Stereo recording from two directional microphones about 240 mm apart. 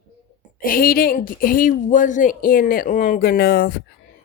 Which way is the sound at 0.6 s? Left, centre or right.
Left.